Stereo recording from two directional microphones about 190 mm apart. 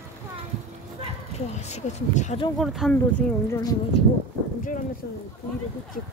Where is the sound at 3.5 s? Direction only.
20° left (ahead or behind).